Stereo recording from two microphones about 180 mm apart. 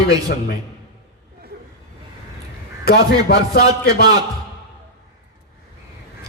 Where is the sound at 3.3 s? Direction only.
60° left (ahead or behind).